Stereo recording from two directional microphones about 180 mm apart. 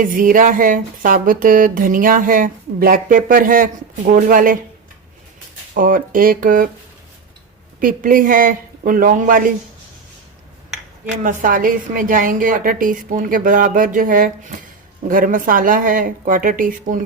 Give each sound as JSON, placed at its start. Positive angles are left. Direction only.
{"t": 0.0, "sound": "speech", "side_deg": -50}
{"t": 5.7, "sound": "speech", "side_deg": -50}
{"t": 7.8, "sound": "speech", "side_deg": -50}
{"t": 11.2, "sound": "speech", "side_deg": -45}